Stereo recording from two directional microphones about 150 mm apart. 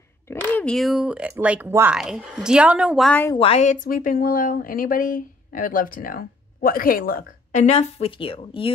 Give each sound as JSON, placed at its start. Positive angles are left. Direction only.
{"t": 0.3, "sound": "speech", "side_deg": 10}
{"t": 2.0, "sound": "a woman's voice", "side_deg": -5}
{"t": 3.1, "sound": "a woman's voice", "side_deg": 15}
{"t": 3.3, "sound": "speech", "side_deg": 40}
{"t": 3.6, "sound": "speech", "side_deg": 65}
{"t": 7.6, "sound": "speech", "side_deg": 40}